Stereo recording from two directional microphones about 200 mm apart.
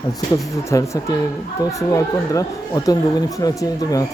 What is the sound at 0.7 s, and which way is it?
Speech, 15° left (ahead or behind).